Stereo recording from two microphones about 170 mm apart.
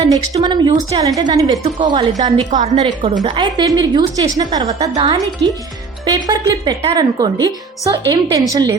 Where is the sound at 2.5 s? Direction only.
40° right (ahead or behind).